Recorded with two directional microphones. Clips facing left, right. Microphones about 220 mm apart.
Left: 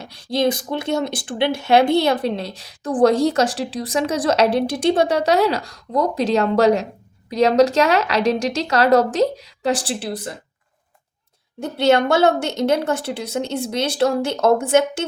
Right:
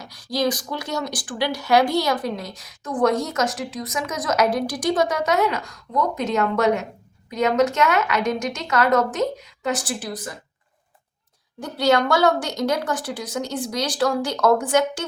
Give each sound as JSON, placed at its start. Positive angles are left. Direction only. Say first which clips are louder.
{"t": 0.0, "sound": "speech", "louder": "left 4 dB", "side_deg": 25}
{"t": 11.6, "sound": "a woman's voice", "louder": "left 3 dB", "side_deg": 25}